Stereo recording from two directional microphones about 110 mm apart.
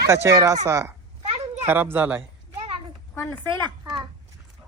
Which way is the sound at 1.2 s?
90° right.